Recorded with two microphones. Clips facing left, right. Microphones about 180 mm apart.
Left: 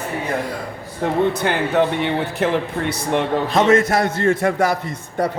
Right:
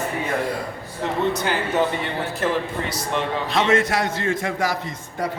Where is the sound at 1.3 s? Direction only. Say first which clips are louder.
Left 4 dB; 60° left (ahead or behind).